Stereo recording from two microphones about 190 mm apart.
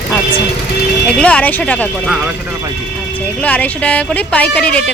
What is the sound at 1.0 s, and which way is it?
Speech, 5° left (ahead or behind).